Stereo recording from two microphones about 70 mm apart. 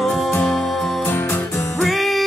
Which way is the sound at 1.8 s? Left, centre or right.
Centre.